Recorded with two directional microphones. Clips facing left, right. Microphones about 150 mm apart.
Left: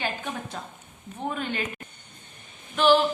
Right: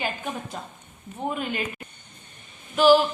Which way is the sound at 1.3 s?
5° right (ahead or behind).